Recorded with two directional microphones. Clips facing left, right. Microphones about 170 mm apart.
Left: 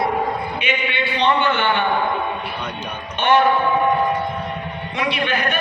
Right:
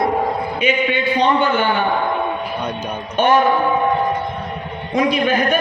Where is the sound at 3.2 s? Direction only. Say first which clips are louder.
Right 2 dB; 45° right (ahead or behind).